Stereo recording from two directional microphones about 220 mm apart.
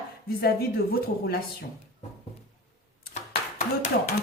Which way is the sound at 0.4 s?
45° left (ahead or behind).